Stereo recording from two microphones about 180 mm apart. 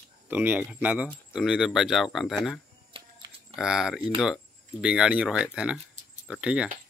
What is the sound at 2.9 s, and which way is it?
Pig, 30° right (ahead or behind).